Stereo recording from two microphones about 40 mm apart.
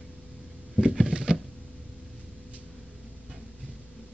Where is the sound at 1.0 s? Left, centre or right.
Centre.